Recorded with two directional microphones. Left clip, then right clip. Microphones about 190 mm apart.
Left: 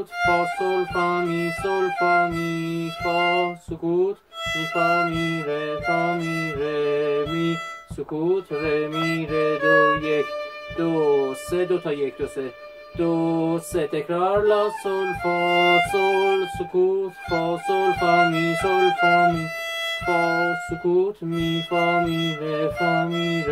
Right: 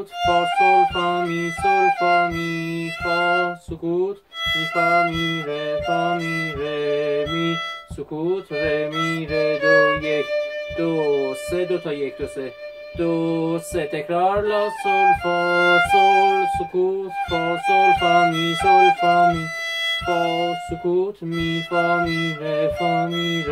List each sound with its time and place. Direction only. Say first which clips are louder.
0.2 s music: right 4 dB; centre (ahead or behind)